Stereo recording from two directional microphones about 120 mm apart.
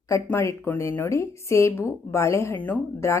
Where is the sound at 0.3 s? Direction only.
15° left (ahead or behind).